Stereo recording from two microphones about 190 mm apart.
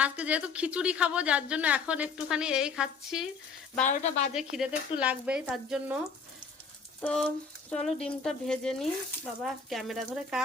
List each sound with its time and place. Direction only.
0.0 s a woman's voice: 5° right (ahead or behind)
3.8 s speech: 35° left (ahead or behind)
4.4 s frying: centre (ahead or behind)
7.0 s frying: 5° left (ahead or behind)